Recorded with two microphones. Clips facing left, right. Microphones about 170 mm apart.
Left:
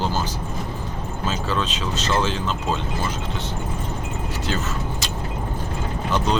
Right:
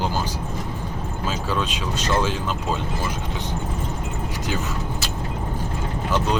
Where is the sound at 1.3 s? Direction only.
10° right (ahead or behind).